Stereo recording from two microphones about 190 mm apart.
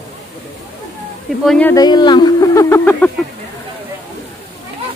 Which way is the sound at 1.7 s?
20° left (ahead or behind).